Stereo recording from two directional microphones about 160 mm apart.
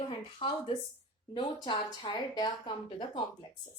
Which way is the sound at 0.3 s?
30° left (ahead or behind).